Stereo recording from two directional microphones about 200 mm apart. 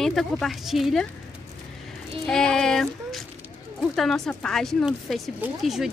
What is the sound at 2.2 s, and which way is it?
Speech, 5° left (ahead or behind).